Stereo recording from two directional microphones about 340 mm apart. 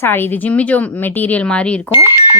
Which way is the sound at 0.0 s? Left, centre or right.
Centre.